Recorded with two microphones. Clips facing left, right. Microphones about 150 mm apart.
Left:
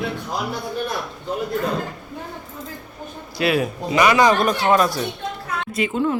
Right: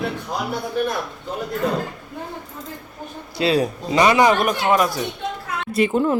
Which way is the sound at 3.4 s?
30° right (ahead or behind).